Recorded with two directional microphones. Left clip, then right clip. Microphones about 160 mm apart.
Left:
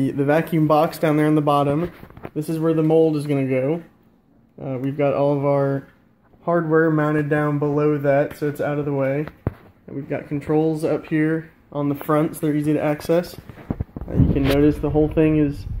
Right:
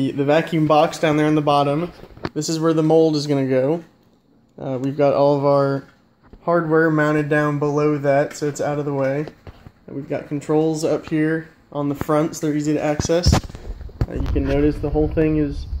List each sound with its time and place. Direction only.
0.0 s speech: centre (ahead or behind)
2.3 s speech: 10° right (ahead or behind); by 13.3 s 10° left (ahead or behind)
14.3 s speech: 30° left (ahead or behind)